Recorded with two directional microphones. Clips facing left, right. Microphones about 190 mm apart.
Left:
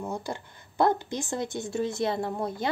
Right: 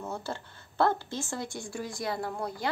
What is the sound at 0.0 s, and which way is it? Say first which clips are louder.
A woman's voice: left 3 dB; 15° left (ahead or behind).